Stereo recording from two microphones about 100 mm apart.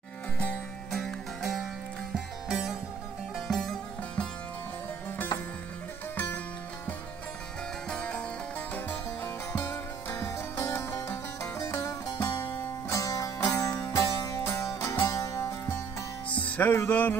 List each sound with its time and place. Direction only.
0.4 s music: 10° left (ahead or behind)
6.1 s music: 15° left (ahead or behind)
7.9 s music: 10° left (ahead or behind); by 11.9 s 35° left (ahead or behind)
12.2 s music: 45° left (ahead or behind)
12.9 s music: 35° left (ahead or behind)
16.3 s music: 15° left (ahead or behind)